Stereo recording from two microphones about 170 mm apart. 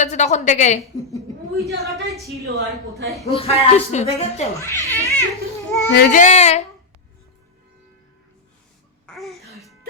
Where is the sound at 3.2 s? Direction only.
35° left (ahead or behind).